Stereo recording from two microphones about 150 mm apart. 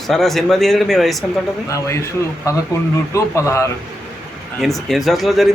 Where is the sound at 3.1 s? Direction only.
20° left (ahead or behind).